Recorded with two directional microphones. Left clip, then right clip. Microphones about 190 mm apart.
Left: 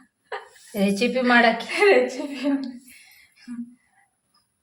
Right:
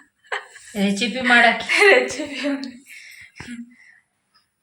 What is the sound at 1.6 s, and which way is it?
A woman's voice, centre (ahead or behind).